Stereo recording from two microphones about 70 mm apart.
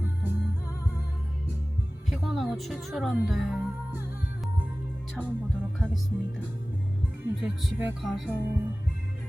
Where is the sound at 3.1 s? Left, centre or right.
Centre.